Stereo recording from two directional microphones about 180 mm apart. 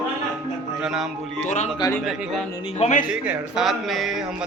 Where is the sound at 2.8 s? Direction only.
45° left (ahead or behind).